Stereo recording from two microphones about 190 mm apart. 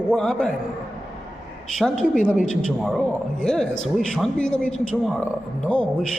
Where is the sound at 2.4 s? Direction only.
45° left (ahead or behind).